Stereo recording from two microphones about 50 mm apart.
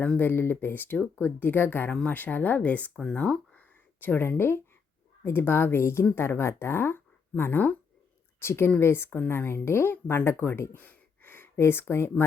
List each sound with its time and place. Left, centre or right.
0.2 s speech: left
0.9 s speech: left
1.2 s speech: left
4.0 s speech: left
8.4 s speech: left
9.0 s speech: left
10.8 s a sound: left